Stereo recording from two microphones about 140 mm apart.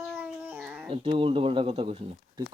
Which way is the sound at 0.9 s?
40° right (ahead or behind).